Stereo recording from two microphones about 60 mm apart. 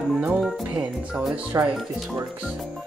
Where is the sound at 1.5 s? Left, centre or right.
Right.